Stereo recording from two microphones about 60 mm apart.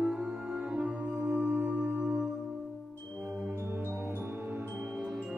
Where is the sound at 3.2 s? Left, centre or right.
Right.